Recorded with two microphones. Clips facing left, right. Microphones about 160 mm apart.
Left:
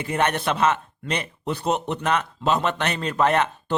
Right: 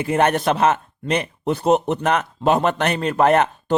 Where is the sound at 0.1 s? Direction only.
45° right (ahead or behind).